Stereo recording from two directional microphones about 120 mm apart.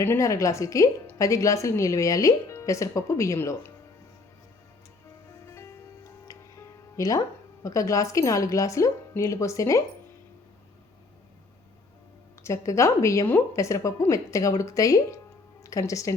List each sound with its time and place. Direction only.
0.0 s speech: 25° left (ahead or behind)
5.5 s music: 20° left (ahead or behind)
7.6 s speech: 30° left (ahead or behind)
12.4 s speech: 25° left (ahead or behind)